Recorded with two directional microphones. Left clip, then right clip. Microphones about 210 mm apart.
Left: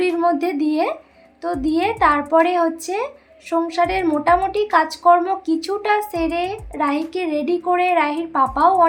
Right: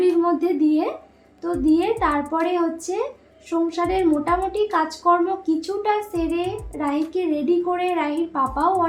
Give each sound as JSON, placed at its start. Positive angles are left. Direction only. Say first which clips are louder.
{"t": 0.2, "sound": "a woman's voice", "louder": "left 1 dB", "side_deg": 45}